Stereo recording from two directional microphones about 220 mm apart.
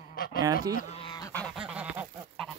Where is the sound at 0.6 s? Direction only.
40° left (ahead or behind).